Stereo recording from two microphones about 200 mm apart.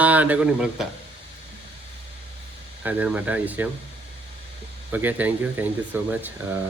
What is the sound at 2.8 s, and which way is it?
Speech, 5° right (ahead or behind).